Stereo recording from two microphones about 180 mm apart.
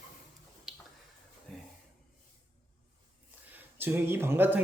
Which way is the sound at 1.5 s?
5° left (ahead or behind).